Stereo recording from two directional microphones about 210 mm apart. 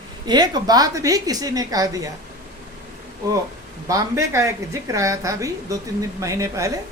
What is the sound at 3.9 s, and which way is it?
A woman's voice, 15° right (ahead or behind).